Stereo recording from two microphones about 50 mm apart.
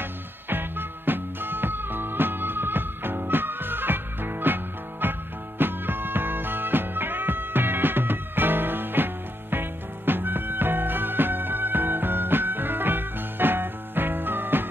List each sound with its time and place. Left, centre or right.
0.0 s music: right